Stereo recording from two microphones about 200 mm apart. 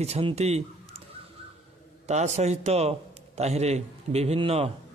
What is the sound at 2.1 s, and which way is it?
A man's voice, 35° right (ahead or behind).